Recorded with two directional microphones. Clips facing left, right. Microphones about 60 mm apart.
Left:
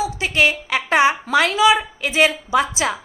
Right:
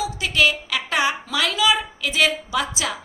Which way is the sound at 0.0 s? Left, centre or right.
Left.